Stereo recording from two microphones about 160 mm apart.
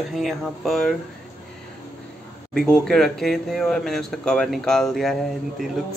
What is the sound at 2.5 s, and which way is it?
Speech, 5° left (ahead or behind).